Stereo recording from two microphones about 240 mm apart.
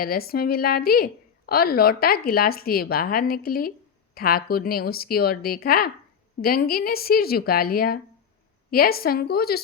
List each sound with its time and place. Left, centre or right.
0.0 s a woman's voice: left